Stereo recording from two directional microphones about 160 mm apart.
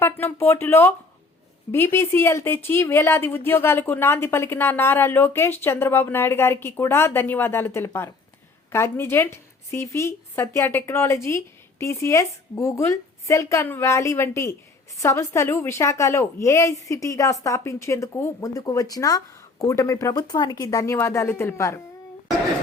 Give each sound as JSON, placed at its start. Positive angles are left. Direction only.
{"t": 0.0, "sound": "speech", "side_deg": 15}